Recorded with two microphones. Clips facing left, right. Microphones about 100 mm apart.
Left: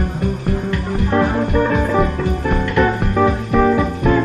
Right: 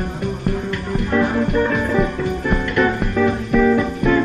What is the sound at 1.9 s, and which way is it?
Music, 30° left (ahead or behind).